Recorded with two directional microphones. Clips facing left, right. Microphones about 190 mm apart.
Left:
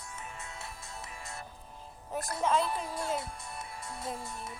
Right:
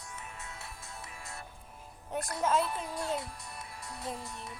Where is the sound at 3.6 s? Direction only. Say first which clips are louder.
Left 2 dB; 25° left (ahead or behind).